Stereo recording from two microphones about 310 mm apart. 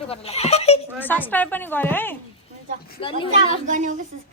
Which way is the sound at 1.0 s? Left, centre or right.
Centre.